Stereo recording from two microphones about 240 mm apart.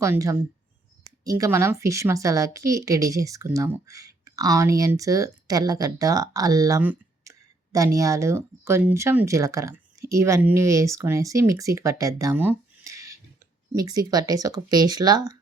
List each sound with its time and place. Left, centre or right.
0.0 s a woman's voice: centre